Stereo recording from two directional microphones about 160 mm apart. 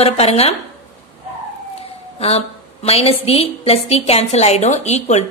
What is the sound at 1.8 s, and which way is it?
A woman's voice, 40° left (ahead or behind).